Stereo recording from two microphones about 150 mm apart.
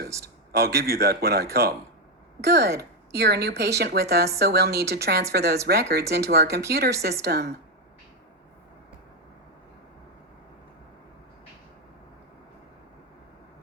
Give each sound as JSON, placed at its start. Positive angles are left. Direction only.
{"t": 0.5, "sound": "speech", "side_deg": -90}